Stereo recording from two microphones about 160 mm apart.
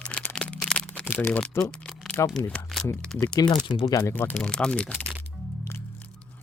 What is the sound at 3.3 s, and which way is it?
Speech, 25° left (ahead or behind).